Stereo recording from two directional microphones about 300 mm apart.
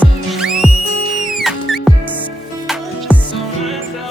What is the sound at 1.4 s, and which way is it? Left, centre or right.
Music, centre.